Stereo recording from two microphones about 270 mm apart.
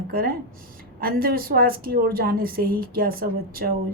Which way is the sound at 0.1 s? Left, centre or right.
Right.